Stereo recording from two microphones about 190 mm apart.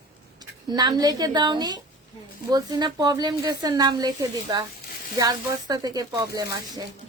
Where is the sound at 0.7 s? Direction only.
20° right (ahead or behind).